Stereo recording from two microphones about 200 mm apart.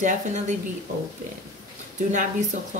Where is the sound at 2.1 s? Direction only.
40° right (ahead or behind).